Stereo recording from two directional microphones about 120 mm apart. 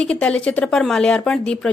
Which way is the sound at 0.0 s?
10° left (ahead or behind).